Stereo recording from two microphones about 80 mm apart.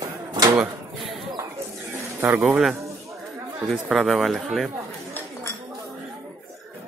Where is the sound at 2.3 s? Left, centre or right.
Right.